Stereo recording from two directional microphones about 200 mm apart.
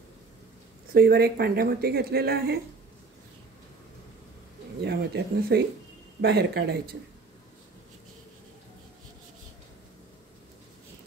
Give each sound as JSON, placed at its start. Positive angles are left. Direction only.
{"t": 0.9, "sound": "speech", "side_deg": -50}
{"t": 4.8, "sound": "speech", "side_deg": -55}